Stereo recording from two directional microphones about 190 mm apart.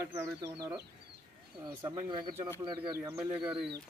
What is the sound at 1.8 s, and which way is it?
Speech, 20° right (ahead or behind).